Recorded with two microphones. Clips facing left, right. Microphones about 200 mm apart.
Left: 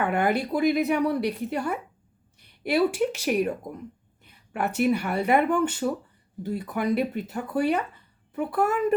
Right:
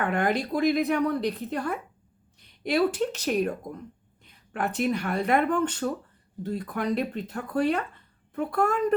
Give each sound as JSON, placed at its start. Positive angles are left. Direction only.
{"t": 0.0, "sound": "speech", "side_deg": 5}